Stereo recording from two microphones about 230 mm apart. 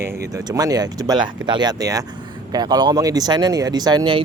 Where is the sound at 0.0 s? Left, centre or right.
Centre.